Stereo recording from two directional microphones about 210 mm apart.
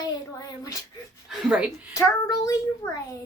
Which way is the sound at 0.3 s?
15° left (ahead or behind).